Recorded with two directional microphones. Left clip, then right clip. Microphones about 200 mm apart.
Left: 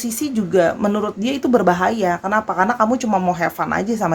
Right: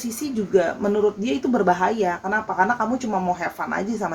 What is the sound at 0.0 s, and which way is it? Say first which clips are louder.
Speech: left 4 dB; 45° left (ahead or behind).